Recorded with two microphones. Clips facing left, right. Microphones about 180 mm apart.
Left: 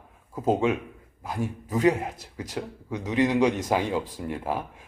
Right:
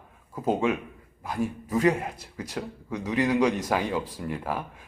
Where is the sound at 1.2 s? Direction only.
10° left (ahead or behind).